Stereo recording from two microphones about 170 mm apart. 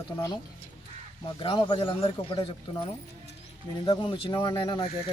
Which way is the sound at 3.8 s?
30° left (ahead or behind).